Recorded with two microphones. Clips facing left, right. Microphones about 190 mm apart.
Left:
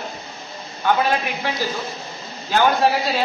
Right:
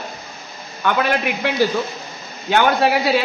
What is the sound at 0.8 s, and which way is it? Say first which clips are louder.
A man's voice: right 1 dB; 65° right (ahead or behind).